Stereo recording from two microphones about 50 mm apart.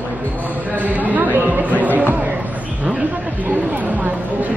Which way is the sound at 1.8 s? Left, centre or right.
Right.